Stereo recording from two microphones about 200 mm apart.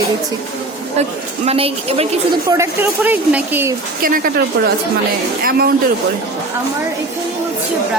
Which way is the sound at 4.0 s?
45° right (ahead or behind).